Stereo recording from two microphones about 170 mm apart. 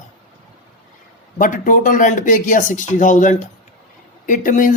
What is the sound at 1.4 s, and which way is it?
Speech, 50° left (ahead or behind).